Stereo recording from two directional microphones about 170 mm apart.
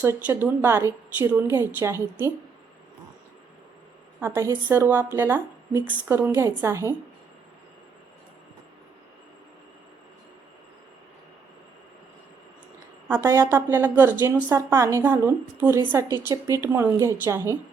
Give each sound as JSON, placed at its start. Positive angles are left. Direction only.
{"t": 0.0, "sound": "a woman's voice", "side_deg": -10}
{"t": 4.2, "sound": "a woman's voice", "side_deg": -15}
{"t": 13.1, "sound": "a woman's voice", "side_deg": -15}